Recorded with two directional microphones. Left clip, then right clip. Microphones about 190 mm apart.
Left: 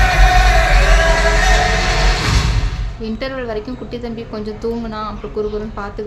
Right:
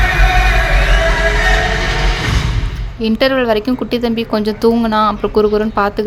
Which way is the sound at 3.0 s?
50° right (ahead or behind).